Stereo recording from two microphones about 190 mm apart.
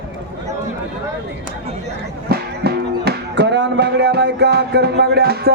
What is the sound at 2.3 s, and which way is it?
Speech, 55° right (ahead or behind).